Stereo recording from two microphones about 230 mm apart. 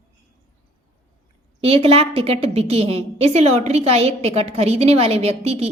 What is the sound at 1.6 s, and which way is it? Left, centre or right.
A woman's voice, right.